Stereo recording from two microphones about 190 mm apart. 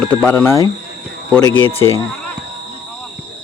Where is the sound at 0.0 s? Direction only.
10° left (ahead or behind).